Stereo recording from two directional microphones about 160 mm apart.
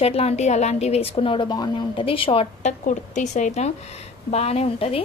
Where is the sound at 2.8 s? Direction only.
50° left (ahead or behind).